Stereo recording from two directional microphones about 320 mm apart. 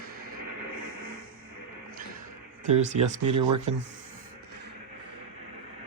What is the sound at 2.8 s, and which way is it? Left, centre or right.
Speech, right.